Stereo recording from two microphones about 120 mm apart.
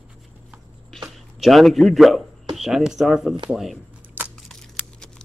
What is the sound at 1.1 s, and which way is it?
Speech, centre (ahead or behind).